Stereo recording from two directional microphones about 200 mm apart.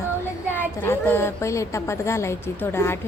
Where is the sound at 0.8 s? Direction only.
10° left (ahead or behind).